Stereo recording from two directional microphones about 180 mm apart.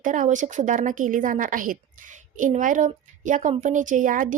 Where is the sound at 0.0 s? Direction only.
45° right (ahead or behind).